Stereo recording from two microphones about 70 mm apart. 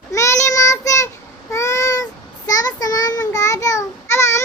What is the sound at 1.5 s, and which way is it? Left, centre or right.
Meow, left.